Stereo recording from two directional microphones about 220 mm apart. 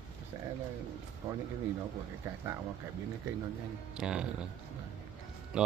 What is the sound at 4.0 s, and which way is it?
Speech, 5° right (ahead or behind).